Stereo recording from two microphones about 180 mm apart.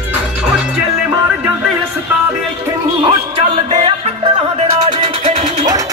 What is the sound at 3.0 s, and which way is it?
Music, 30° right (ahead or behind).